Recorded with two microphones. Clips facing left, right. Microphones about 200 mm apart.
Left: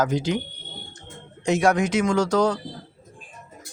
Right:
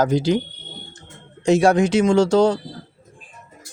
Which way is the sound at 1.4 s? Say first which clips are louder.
Right 5 dB; 30° right (ahead or behind).